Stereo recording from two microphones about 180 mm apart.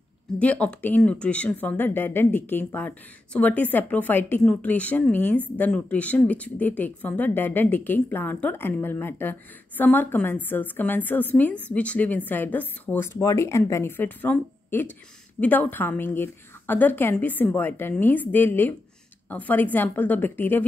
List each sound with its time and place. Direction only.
0.4 s speech: 10° left (ahead or behind)